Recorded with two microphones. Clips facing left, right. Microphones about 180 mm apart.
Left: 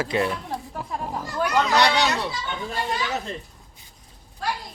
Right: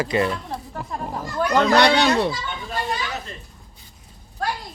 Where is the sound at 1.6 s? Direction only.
60° right (ahead or behind).